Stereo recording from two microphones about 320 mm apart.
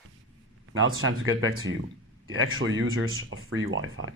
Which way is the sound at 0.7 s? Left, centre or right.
Right.